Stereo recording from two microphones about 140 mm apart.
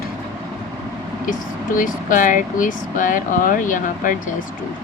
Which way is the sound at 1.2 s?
75° left (ahead or behind).